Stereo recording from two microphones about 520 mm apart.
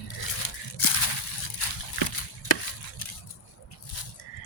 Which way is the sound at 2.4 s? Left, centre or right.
Left.